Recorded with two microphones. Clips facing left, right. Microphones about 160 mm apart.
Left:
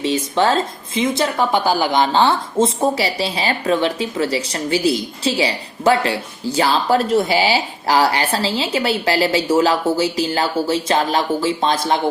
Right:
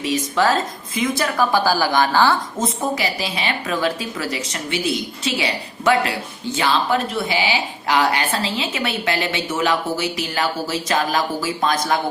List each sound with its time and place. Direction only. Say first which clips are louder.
0.0 s a woman's voice: left 2 dB; 30° left (ahead or behind)